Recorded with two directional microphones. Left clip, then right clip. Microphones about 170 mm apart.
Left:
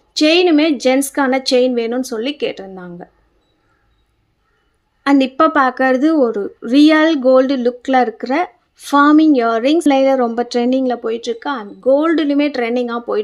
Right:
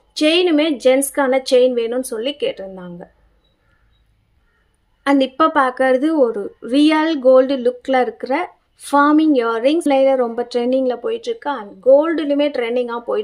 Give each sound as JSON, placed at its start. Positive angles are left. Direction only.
{"t": 0.1, "sound": "speech", "side_deg": 15}
{"t": 5.0, "sound": "speech", "side_deg": 15}